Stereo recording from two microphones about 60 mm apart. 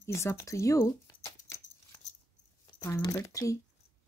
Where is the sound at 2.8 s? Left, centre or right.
Left.